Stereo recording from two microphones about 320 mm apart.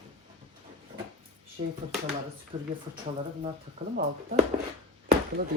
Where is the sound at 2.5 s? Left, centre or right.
Centre.